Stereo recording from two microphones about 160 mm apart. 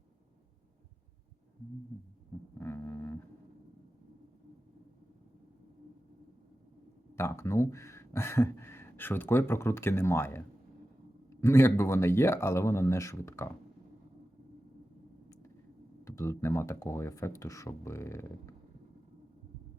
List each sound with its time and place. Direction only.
1.9 s speech: 15° left (ahead or behind)
7.2 s speech: 20° left (ahead or behind)
16.0 s speech: 15° left (ahead or behind)